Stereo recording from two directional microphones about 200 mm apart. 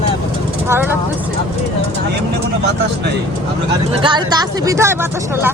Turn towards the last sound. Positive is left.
turn(degrees=-15)  # may be behind; listen again after turning